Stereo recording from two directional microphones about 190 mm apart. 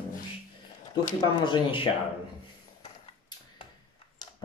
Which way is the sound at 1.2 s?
25° left (ahead or behind).